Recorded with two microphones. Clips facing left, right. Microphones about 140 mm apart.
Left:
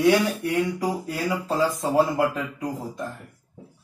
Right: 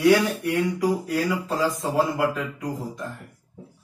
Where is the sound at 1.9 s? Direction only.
30° left (ahead or behind).